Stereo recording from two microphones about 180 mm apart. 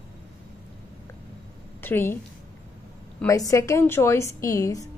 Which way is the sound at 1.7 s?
10° left (ahead or behind).